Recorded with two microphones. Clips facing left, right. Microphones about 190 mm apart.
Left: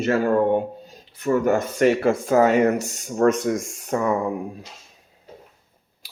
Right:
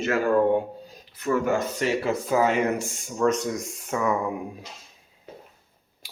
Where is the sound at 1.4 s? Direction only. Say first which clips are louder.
Left 6 dB; 50° left (ahead or behind).